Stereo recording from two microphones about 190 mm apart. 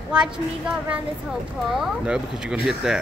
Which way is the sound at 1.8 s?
5° right (ahead or behind).